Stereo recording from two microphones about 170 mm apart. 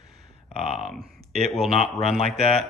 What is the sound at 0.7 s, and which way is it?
Speech, centre (ahead or behind).